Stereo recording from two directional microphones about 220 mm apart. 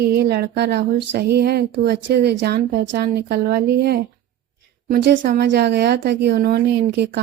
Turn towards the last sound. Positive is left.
turn(degrees=-50)  # may be behind; listen again after turning